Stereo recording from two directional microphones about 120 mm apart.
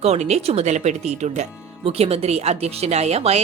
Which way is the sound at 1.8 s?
55° right (ahead or behind).